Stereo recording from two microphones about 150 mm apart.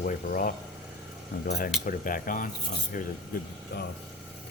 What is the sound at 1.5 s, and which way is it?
Speech, 90° left.